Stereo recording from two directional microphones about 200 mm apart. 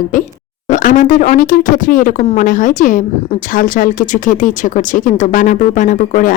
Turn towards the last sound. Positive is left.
turn(degrees=40)  # may be behind; listen again after turning